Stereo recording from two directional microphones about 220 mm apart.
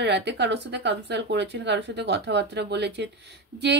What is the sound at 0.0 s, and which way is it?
Speech, 50° right (ahead or behind).